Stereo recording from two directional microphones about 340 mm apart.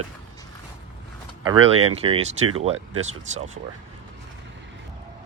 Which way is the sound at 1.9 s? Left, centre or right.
Centre.